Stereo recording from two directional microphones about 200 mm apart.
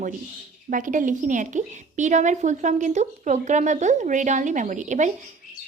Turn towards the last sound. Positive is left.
turn(degrees=-40)  # may be behind; listen again after turning